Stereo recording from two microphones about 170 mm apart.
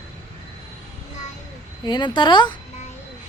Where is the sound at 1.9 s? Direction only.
25° left (ahead or behind).